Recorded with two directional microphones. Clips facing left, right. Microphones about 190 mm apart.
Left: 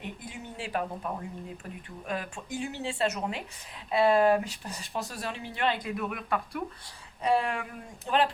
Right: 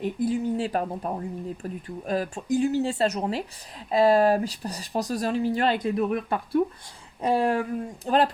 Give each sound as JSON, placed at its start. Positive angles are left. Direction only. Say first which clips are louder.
{"t": 0.0, "sound": "speech", "louder": "right 15 dB", "side_deg": -40}